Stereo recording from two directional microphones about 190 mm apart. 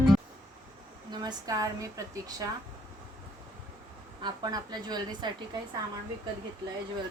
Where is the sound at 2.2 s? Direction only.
20° right (ahead or behind).